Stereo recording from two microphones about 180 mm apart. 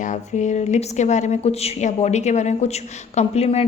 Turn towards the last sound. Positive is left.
turn(degrees=35)  # may be behind; listen again after turning